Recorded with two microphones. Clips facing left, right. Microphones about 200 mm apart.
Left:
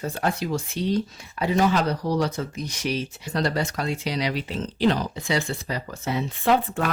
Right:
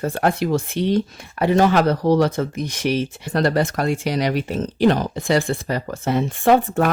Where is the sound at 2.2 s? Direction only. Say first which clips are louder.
Right 7 dB; 55° right (ahead or behind).